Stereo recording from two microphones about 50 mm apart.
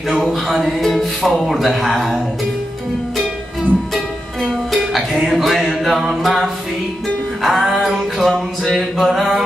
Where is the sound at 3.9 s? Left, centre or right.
Centre.